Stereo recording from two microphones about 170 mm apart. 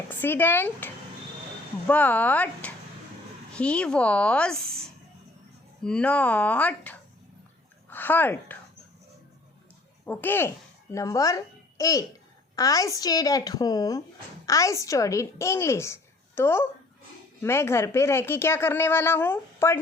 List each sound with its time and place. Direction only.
0.1 s speech: 10° left (ahead or behind)
1.9 s a woman's voice: 10° left (ahead or behind)
10.1 s a child's voice: 10° left (ahead or behind)